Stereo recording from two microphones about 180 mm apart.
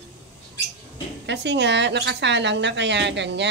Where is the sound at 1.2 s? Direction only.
75° right (ahead or behind).